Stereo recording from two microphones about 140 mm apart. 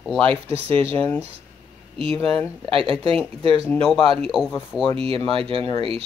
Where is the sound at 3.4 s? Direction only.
45° right (ahead or behind).